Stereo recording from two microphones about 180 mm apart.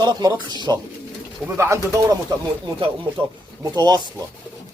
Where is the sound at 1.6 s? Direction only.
15° right (ahead or behind).